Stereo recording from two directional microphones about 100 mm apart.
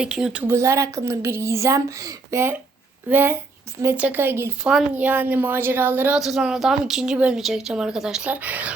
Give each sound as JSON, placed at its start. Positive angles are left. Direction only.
{"t": 0.0, "sound": "speech", "side_deg": -10}
{"t": 0.4, "sound": "a woman's voice", "side_deg": -30}
{"t": 6.1, "sound": "a woman's voice", "side_deg": -5}